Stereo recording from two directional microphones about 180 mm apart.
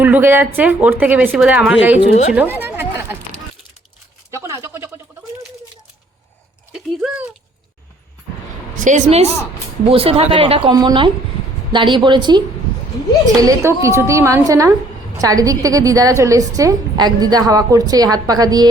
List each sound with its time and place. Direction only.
0.0 s a woman's voice: 10° right (ahead or behind)
2.0 s speech: 35° left (ahead or behind)
2.3 s speech: 10° right (ahead or behind)
4.3 s a sound: 15° right (ahead or behind)
6.7 s a sound: 5° right (ahead or behind)
8.8 s a woman's voice: 40° right (ahead or behind)
13.4 s a woman's voice: 15° right (ahead or behind)